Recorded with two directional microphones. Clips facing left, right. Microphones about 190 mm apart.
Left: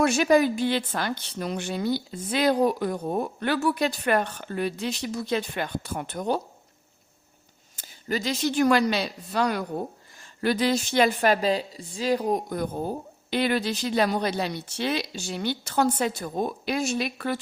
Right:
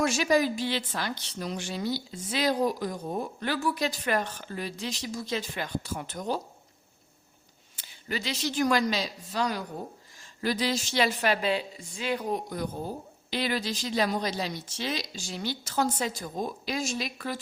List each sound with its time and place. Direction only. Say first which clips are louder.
0.0 s a woman's voice: left 5 dB; 55° left (ahead or behind)
7.8 s a woman's voice: left 5 dB; 45° left (ahead or behind)
12.5 s a woman's voice: left 5 dB; 55° left (ahead or behind)